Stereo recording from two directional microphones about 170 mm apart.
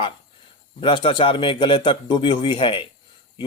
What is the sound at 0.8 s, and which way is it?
A man's voice, 30° left (ahead or behind).